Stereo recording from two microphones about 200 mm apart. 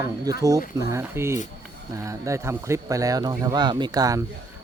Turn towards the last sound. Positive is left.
turn(degrees=-20)  # may be behind; listen again after turning